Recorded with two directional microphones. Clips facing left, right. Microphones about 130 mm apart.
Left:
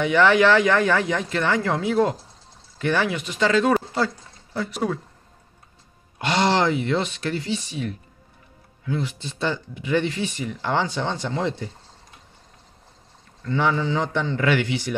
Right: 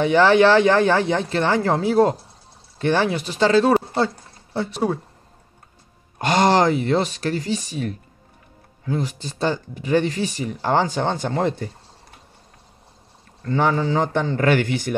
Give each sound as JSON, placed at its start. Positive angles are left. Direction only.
{"t": 0.0, "sound": "speech", "side_deg": -35}
{"t": 6.1, "sound": "speech", "side_deg": -45}
{"t": 13.4, "sound": "a man's voice", "side_deg": -40}